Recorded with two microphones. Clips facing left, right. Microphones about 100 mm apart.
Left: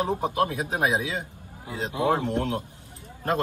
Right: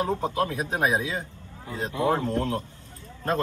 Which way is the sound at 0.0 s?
20° left (ahead or behind).